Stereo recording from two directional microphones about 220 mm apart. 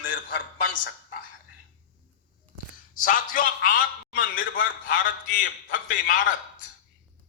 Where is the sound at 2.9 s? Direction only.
40° left (ahead or behind).